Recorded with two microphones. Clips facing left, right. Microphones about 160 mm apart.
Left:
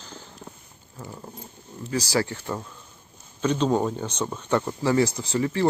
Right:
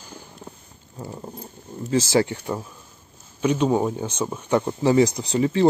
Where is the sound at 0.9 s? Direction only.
20° right (ahead or behind).